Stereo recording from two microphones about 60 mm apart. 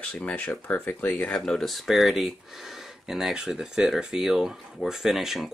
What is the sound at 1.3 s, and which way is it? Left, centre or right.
Speech, centre.